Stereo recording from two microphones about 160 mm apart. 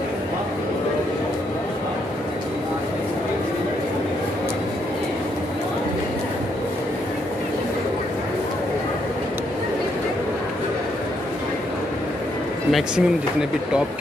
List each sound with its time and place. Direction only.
12.7 s speech: 5° right (ahead or behind)